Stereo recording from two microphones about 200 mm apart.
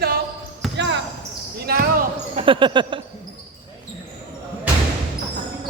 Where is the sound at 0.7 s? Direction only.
60° right (ahead or behind).